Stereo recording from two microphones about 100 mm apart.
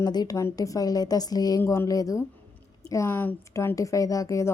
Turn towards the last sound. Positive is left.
turn(degrees=35)  # may be behind; listen again after turning